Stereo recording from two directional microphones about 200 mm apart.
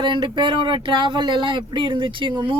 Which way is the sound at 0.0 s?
25° right (ahead or behind).